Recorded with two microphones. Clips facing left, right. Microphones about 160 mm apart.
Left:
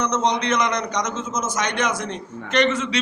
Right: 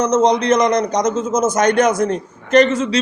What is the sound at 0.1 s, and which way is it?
A man's voice, 40° right (ahead or behind).